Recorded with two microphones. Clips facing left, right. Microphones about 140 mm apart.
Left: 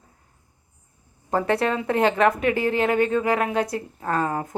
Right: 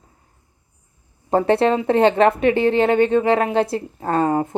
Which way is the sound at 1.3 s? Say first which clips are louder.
Right 6 dB; 30° right (ahead or behind).